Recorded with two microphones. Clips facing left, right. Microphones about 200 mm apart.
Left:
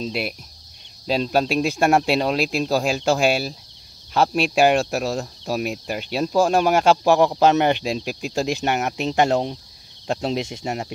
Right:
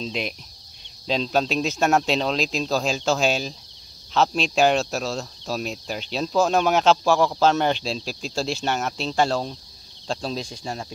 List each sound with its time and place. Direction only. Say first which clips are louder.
0.0 s speech: left 3 dB; 5° left (ahead or behind); by 10.9 s 25° left (ahead or behind)